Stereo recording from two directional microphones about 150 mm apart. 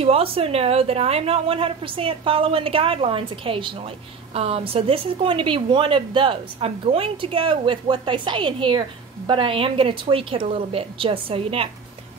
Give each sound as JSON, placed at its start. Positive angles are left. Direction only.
{"t": 0.0, "sound": "a woman's voice", "side_deg": -40}